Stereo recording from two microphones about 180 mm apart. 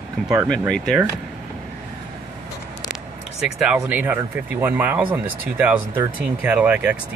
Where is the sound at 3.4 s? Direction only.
5° right (ahead or behind).